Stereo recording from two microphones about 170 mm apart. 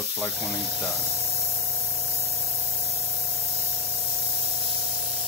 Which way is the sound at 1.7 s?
Centre (ahead or behind).